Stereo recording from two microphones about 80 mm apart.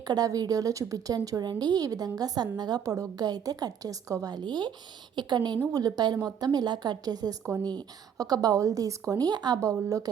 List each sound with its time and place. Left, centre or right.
0.0 s a woman's voice: right
5.7 s a woman's voice: right